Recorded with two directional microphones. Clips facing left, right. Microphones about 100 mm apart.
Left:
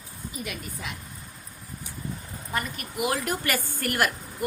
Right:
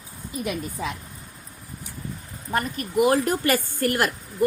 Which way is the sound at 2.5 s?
40° right (ahead or behind).